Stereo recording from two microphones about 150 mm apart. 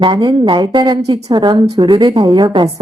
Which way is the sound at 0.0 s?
30° right (ahead or behind).